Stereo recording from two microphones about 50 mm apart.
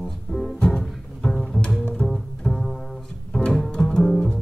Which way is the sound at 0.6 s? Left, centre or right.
Centre.